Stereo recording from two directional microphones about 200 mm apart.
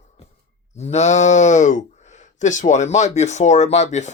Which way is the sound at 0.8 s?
35° left (ahead or behind).